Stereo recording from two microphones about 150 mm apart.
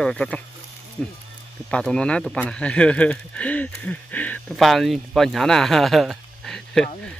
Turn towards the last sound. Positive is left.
turn(degrees=5)  # may be behind; listen again after turning